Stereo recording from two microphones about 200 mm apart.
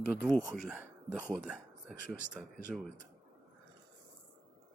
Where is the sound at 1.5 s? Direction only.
5° right (ahead or behind).